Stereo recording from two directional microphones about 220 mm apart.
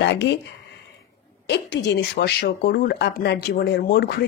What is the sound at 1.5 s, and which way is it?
Speech, 50° left (ahead or behind).